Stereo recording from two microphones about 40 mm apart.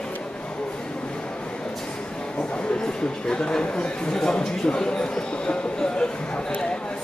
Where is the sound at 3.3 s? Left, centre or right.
Left.